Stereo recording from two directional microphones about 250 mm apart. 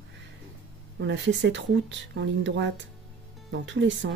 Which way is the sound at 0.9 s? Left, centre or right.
Right.